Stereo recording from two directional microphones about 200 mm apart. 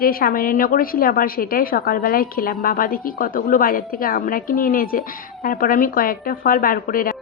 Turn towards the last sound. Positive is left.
turn(degrees=45)  # may be behind; listen again after turning